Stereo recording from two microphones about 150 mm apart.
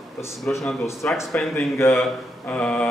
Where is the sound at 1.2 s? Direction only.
Centre (ahead or behind).